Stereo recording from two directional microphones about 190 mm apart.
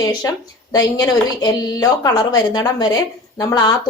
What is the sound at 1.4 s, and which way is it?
A woman's voice, 20° left (ahead or behind).